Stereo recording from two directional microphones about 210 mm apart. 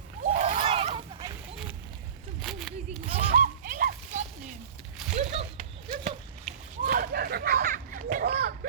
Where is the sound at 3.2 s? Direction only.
40° right (ahead or behind).